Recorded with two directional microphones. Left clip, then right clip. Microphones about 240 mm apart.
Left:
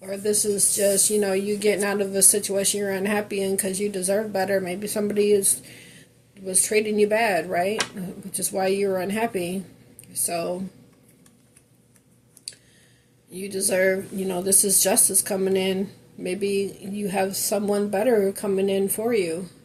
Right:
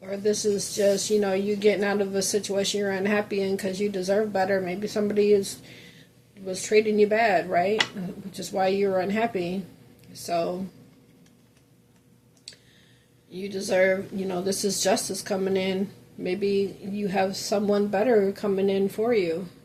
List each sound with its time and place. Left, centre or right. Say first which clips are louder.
0.0 s speech: even; left
13.3 s speech: even; left